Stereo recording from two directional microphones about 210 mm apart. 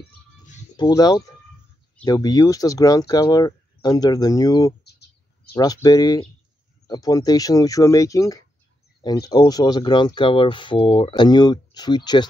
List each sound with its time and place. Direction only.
0.7 s speech: 20° left (ahead or behind)